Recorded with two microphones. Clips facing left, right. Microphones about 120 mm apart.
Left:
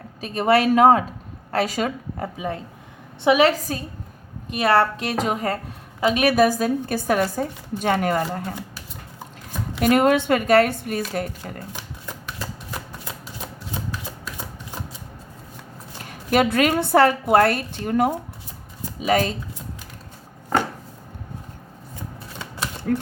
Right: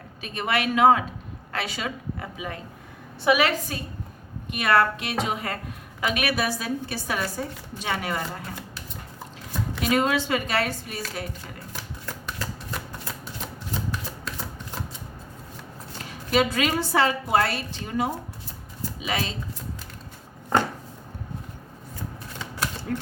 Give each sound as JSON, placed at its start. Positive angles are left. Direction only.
{"t": 0.2, "sound": "a woman's voice", "side_deg": 35}
{"t": 6.0, "sound": "a woman's voice", "side_deg": 30}
{"t": 6.3, "sound": "a woman's voice", "side_deg": 45}
{"t": 9.8, "sound": "a woman's voice", "side_deg": 55}
{"t": 11.7, "sound": "a sound", "side_deg": 15}
{"t": 16.0, "sound": "a woman's voice", "side_deg": 55}
{"t": 22.9, "sound": "speech", "side_deg": 50}